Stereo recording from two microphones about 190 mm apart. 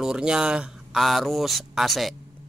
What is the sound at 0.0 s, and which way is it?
Speech, 5° right (ahead or behind).